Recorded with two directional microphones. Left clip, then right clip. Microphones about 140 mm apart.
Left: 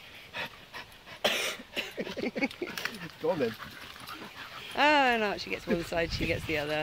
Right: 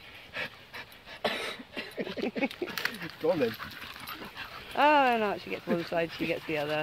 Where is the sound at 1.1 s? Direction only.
90° left.